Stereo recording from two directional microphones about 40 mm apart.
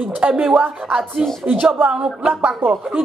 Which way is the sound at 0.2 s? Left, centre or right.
Right.